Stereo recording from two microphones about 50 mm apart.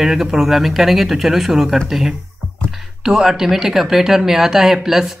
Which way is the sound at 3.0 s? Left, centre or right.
Centre.